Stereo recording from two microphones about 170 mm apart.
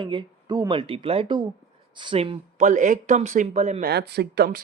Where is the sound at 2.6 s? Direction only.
50° right (ahead or behind).